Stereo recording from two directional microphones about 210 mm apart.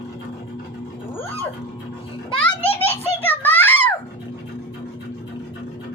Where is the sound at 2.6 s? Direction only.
25° left (ahead or behind).